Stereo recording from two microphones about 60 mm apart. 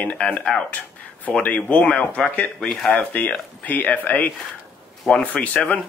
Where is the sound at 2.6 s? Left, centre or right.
Centre.